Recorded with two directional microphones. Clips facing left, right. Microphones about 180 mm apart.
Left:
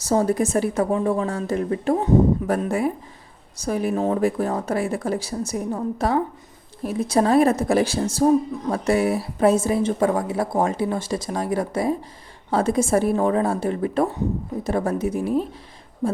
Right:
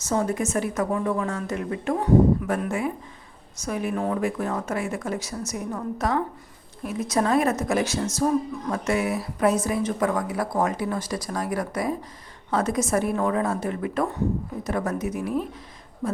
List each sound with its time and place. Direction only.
0.0 s a woman's voice: 35° left (ahead or behind)